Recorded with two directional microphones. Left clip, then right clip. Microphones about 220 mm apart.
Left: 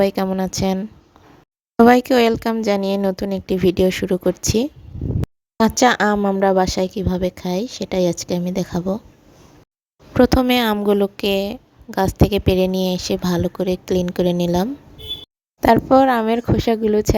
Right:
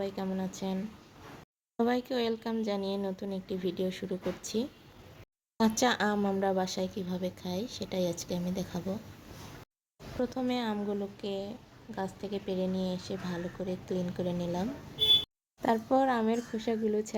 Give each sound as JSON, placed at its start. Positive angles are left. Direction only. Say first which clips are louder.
{"t": 0.0, "sound": "a woman's voice", "louder": "left 17 dB", "side_deg": 50}
{"t": 10.2, "sound": "a woman's voice", "louder": "left 18 dB", "side_deg": 45}